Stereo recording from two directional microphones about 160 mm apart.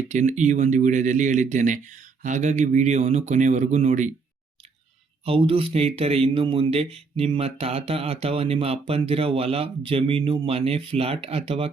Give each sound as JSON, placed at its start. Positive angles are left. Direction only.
{"t": 0.1, "sound": "speech", "side_deg": -50}
{"t": 5.2, "sound": "speech", "side_deg": -35}